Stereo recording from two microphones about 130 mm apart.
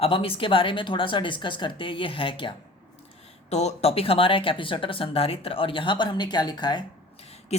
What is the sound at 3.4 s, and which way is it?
A woman's voice, 60° left (ahead or behind).